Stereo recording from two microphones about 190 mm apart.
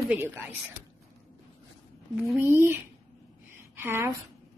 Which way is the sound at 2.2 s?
10° right (ahead or behind).